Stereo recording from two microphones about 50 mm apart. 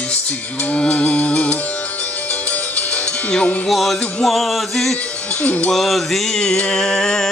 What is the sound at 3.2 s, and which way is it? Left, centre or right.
Music, left.